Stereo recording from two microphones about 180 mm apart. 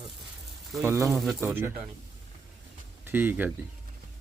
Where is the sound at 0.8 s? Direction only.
15° right (ahead or behind).